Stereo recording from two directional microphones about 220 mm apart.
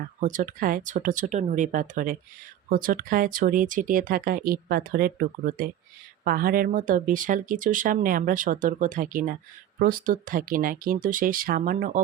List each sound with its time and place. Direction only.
0.2 s speech: 35° right (ahead or behind)